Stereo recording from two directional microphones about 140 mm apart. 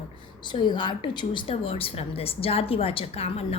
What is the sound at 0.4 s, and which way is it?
A woman's voice, 35° left (ahead or behind).